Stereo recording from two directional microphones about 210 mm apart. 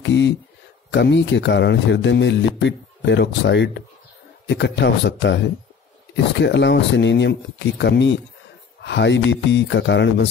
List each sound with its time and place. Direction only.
0.0 s a sound: 55° left (ahead or behind)
0.9 s speech: 55° left (ahead or behind)
6.4 s speech: 55° left (ahead or behind)